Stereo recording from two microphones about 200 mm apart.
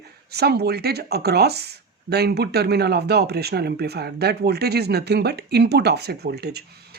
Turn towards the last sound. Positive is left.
turn(degrees=-55)  # may be behind; listen again after turning